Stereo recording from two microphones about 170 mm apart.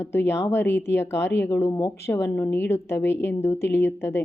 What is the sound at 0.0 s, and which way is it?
Speech, 15° left (ahead or behind).